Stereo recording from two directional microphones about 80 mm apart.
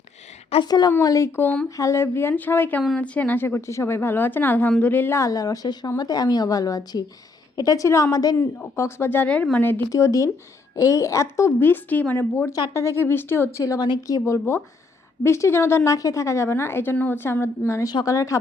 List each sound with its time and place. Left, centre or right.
0.6 s a woman's voice: left
1.0 s a woman's voice: left
5.1 s a woman's voice: left
8.4 s a woman's voice: left
9.0 s a woman's voice: left
9.9 s a woman's voice: left
11.6 s a woman's voice: left
13.7 s a woman's voice: left
14.1 s a woman's voice: left